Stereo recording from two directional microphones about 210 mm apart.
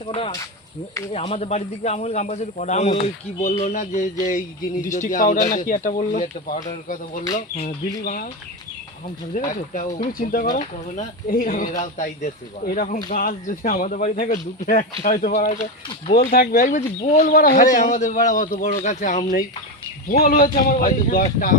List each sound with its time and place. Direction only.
0.0 s speech: 25° left (ahead or behind)
9.3 s speech: 40° left (ahead or behind)